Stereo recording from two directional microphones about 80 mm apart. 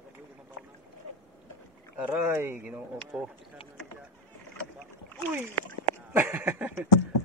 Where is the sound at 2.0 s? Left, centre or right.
Centre.